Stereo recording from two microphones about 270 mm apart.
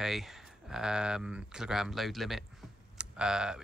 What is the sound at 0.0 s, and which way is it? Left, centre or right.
Speech, centre.